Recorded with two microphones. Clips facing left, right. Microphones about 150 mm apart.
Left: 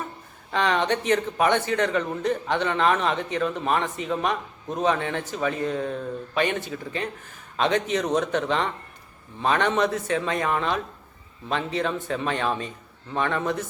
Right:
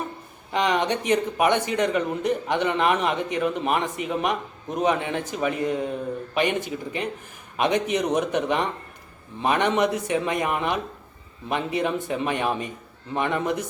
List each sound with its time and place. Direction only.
0.5 s speech: 15° right (ahead or behind)